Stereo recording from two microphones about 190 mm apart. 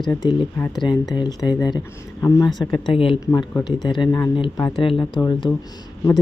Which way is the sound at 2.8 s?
30° left (ahead or behind).